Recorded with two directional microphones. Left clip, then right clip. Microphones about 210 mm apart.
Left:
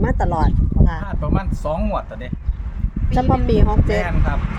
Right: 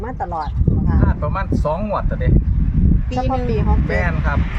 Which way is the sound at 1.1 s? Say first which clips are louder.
Right 3 dB; 10° right (ahead or behind).